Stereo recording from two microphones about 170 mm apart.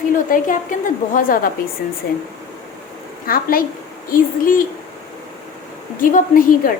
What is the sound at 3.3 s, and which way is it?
A woman's voice, 60° left (ahead or behind).